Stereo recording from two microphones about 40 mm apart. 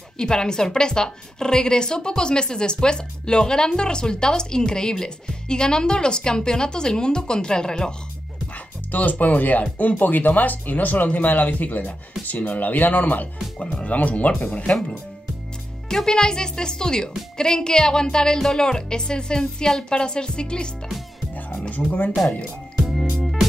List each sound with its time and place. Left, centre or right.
0.2 s a woman's voice: centre
8.9 s speech: left
13.6 s a woman's voice: left
13.8 s speech: left
14.7 s a woman's voice: left
21.6 s speech: left
22.8 s music: centre